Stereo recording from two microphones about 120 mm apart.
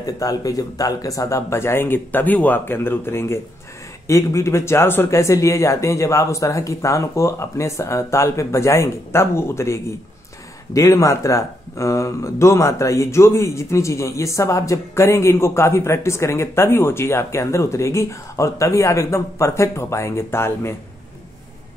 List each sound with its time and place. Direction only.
0.0 s speech: 30° left (ahead or behind)